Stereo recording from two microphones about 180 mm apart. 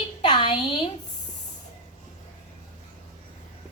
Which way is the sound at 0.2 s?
25° left (ahead or behind).